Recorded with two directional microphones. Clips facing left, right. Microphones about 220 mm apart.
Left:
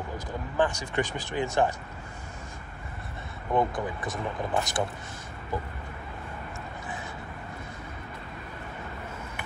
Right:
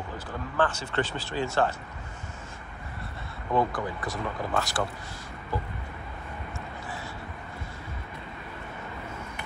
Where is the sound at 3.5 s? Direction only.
20° left (ahead or behind).